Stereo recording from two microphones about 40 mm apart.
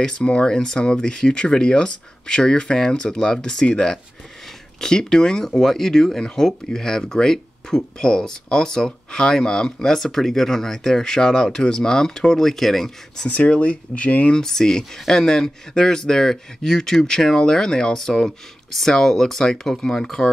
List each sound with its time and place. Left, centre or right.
0.0 s speech: left
4.7 s speech: centre
9.9 s speech: centre
13.3 s speech: left
14.3 s speech: centre